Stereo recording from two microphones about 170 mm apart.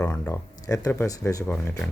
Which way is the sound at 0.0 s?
15° left (ahead or behind).